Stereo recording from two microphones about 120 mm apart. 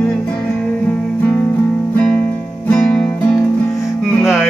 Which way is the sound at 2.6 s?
5° left (ahead or behind).